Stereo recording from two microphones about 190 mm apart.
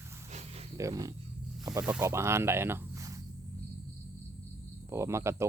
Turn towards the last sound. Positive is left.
turn(degrees=-15)  # may be behind; listen again after turning